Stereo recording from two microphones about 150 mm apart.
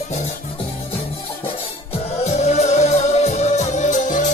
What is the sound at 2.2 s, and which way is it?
Music, 50° left (ahead or behind).